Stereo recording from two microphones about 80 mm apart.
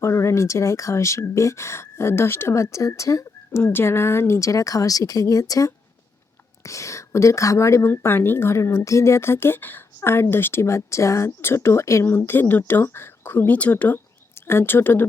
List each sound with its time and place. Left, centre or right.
0.0 s a woman's voice: left
3.7 s a woman's voice: left
14.4 s a woman's voice: left